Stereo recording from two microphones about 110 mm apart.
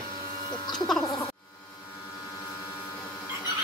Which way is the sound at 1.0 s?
35° left (ahead or behind).